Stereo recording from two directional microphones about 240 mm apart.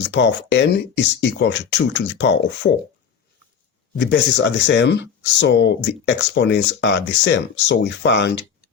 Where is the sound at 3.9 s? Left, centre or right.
Left.